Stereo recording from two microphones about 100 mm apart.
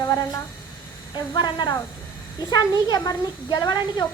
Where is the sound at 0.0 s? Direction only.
30° left (ahead or behind).